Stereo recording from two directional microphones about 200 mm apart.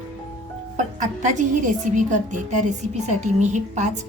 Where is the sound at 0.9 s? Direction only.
40° right (ahead or behind).